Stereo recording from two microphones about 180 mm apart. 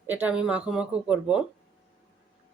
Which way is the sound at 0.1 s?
10° right (ahead or behind).